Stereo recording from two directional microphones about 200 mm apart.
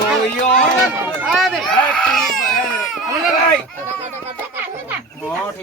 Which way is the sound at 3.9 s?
30° right (ahead or behind).